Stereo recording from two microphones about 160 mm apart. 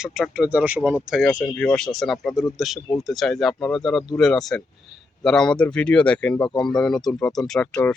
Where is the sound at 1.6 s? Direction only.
5° left (ahead or behind).